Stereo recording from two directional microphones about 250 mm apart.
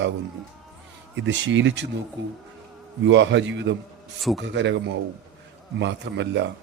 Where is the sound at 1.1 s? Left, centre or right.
Right.